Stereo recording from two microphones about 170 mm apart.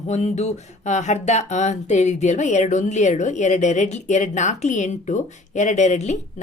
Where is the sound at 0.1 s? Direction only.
40° left (ahead or behind).